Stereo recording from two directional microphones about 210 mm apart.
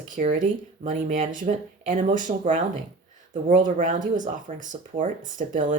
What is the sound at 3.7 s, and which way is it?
Speech, 40° right (ahead or behind).